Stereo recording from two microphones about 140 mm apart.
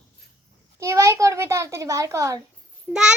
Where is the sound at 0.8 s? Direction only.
20° right (ahead or behind).